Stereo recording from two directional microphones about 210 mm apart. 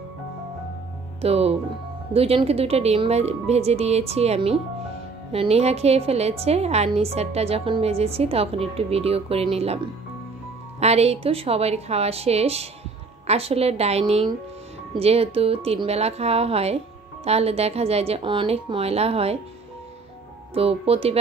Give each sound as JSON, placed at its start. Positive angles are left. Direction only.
{"t": 1.2, "sound": "a woman's voice", "side_deg": -30}
{"t": 10.8, "sound": "a woman's voice", "side_deg": -30}
{"t": 20.5, "sound": "a woman's voice", "side_deg": -30}